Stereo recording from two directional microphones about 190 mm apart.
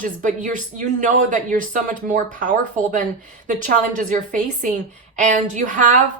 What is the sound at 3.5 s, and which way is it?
A woman's voice, 45° right (ahead or behind).